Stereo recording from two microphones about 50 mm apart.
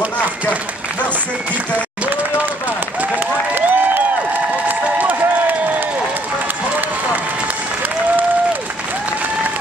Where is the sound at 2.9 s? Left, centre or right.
Right.